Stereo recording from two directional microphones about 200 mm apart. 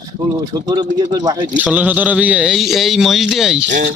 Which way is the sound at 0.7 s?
20° right (ahead or behind).